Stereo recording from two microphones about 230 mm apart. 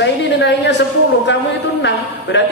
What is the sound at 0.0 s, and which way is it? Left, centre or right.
A woman's voice, left.